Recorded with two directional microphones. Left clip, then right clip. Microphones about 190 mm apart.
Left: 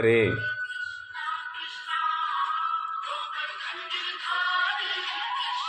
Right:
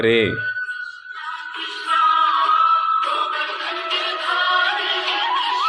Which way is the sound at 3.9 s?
40° right (ahead or behind).